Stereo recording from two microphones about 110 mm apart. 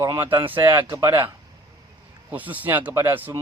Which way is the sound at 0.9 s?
40° right (ahead or behind).